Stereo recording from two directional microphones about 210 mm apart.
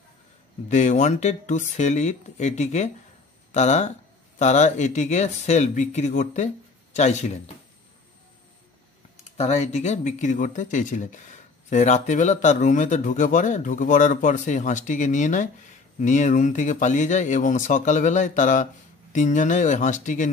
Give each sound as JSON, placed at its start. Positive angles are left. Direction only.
{"t": 0.7, "sound": "speech", "side_deg": 35}
{"t": 9.4, "sound": "speech", "side_deg": 30}